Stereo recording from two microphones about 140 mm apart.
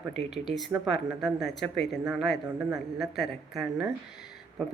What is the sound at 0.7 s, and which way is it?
Speech, 15° right (ahead or behind).